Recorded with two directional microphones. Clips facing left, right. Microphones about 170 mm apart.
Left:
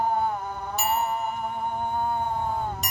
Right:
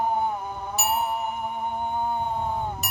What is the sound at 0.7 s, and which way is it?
Music, 5° right (ahead or behind).